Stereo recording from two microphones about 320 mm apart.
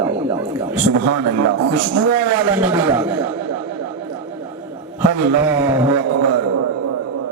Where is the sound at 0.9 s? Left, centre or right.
Right.